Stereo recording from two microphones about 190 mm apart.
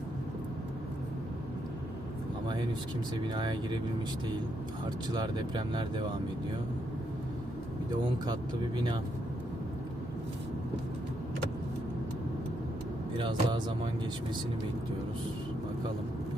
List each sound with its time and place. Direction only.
3.2 s speech: 25° right (ahead or behind)
5.1 s speech: 25° right (ahead or behind)
8.3 s speech: 20° right (ahead or behind)
13.1 s speech: 25° right (ahead or behind)